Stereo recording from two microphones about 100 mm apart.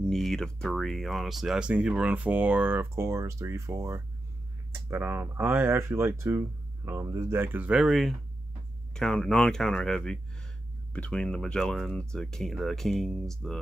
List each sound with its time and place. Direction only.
0.0 s speech: 5° left (ahead or behind)
8.9 s speech: 10° left (ahead or behind)